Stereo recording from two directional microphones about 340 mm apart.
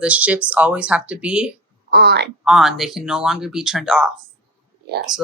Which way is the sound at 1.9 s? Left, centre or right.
Right.